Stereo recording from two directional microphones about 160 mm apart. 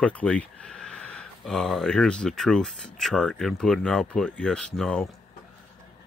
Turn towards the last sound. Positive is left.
turn(degrees=5)  # may be behind; listen again after turning